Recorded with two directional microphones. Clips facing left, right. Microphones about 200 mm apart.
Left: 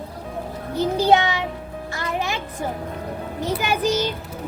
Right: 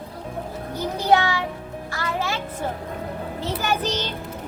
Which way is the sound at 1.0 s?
20° left (ahead or behind).